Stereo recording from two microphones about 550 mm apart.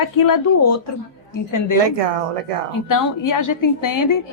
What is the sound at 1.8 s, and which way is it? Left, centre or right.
Speech, right.